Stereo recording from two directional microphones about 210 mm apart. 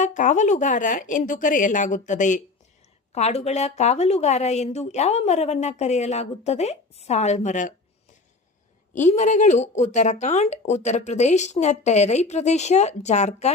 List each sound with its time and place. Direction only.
0.0 s a woman's voice: 35° left (ahead or behind)
9.0 s a woman's voice: 35° left (ahead or behind)